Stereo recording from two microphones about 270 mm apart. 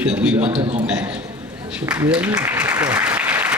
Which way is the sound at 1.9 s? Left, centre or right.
Centre.